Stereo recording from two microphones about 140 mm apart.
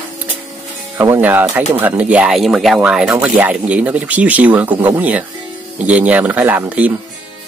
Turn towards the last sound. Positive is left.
turn(degrees=-10)  # may be behind; listen again after turning